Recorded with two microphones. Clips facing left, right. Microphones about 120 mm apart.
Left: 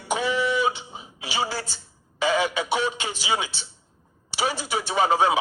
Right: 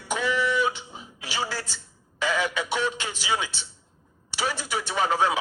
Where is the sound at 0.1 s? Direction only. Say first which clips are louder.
Left 2 dB; 20° left (ahead or behind).